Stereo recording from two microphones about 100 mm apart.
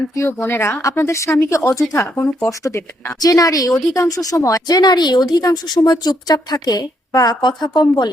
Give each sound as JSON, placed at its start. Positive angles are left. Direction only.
{"t": 0.4, "sound": "speech", "side_deg": 25}
{"t": 3.7, "sound": "speech", "side_deg": 0}
{"t": 3.9, "sound": "speech", "side_deg": 35}